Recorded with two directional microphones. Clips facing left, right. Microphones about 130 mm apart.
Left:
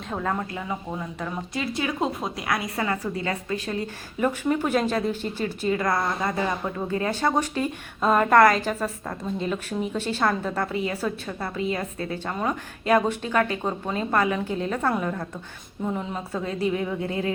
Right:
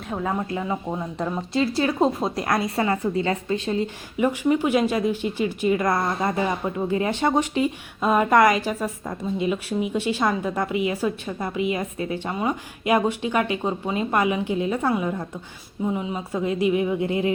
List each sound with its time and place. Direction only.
0.1 s speech: 10° right (ahead or behind)
0.5 s a woman's voice: 25° right (ahead or behind)
2.6 s a woman's voice: 25° right (ahead or behind)
4.2 s speech: 10° right (ahead or behind)